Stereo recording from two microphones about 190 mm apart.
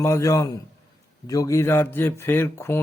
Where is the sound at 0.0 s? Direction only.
15° left (ahead or behind).